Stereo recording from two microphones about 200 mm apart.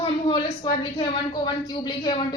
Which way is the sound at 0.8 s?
20° left (ahead or behind).